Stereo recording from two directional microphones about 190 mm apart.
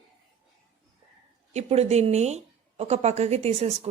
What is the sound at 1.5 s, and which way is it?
A woman's voice, 35° right (ahead or behind).